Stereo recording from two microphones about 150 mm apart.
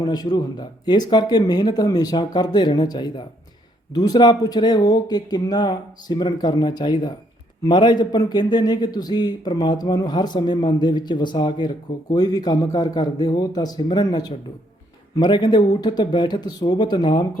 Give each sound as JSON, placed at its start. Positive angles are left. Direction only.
{"t": 0.0, "sound": "a man's voice", "side_deg": 25}